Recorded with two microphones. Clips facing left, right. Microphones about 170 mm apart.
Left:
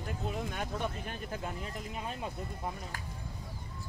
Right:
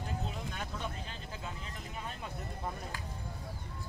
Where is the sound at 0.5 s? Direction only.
55° left (ahead or behind).